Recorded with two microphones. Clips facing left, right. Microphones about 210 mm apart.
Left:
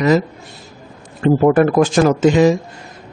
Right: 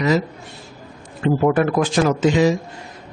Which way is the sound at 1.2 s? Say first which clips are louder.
Left 5 dB; 45° left (ahead or behind).